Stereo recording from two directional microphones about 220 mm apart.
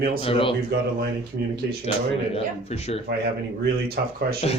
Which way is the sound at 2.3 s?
30° left (ahead or behind).